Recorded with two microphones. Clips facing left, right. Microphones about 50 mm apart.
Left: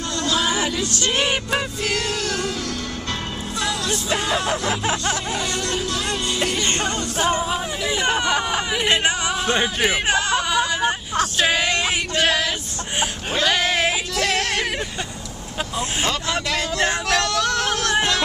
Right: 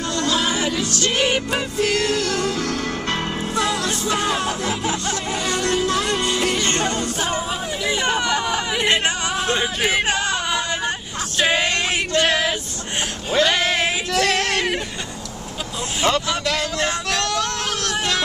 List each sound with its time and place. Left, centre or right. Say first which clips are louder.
1.0 s music: right 2 dB; centre
2.6 s music: right 4 dB; right
5.6 s music: right 4 dB; right
6.6 s music: right 2 dB; left
7.8 s speech: right 2 dB; centre
8.1 s speech: left 1 dB; left
13.4 s a sound: right 1 dB; centre
17.1 s speech: left 2 dB; centre